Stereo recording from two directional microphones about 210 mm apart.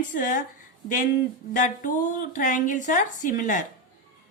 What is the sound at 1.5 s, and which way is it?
A woman's voice, 40° left (ahead or behind).